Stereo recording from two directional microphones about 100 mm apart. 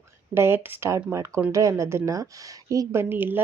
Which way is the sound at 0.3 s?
25° right (ahead or behind).